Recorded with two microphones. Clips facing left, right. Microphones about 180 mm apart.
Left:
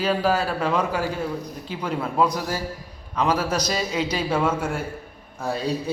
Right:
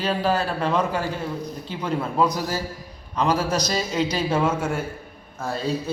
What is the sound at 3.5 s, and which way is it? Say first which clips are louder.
A man's voice: even; 10° left (ahead or behind).